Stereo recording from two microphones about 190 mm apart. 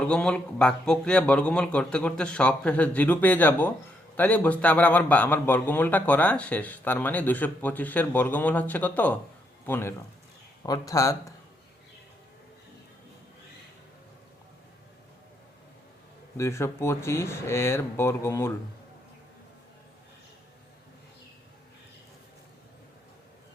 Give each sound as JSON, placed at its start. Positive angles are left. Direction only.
{"t": 0.0, "sound": "a man's voice", "side_deg": 5}
{"t": 16.4, "sound": "a man's voice", "side_deg": 15}